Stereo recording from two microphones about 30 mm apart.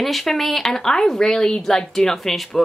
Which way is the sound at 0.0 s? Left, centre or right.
Centre.